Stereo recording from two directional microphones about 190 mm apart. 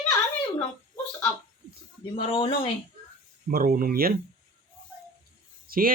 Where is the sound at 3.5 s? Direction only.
50° right (ahead or behind).